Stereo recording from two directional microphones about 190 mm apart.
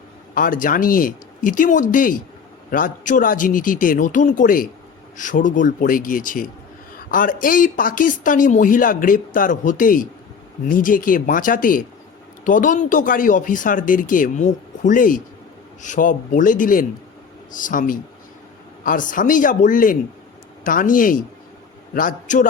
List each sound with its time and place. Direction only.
0.3 s speech: 45° left (ahead or behind)